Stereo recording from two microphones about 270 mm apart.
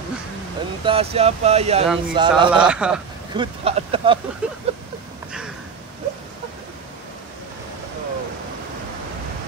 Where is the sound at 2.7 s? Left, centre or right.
Centre.